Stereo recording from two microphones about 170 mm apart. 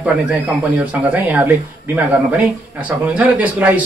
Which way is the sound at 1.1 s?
10° right (ahead or behind).